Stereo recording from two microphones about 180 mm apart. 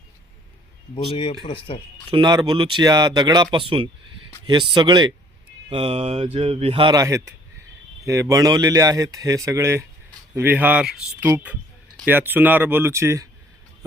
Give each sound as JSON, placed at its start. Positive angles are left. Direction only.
{"t": 0.9, "sound": "speech", "side_deg": 30}
{"t": 2.0, "sound": "speech", "side_deg": -25}